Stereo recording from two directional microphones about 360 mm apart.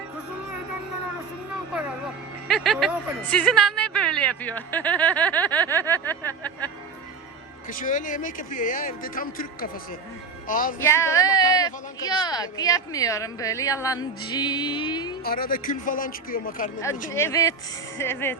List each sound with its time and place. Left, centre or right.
2.5 s speech: centre
7.7 s speech: left
10.8 s a woman's voice: centre
15.2 s speech: left
17.2 s a woman's voice: centre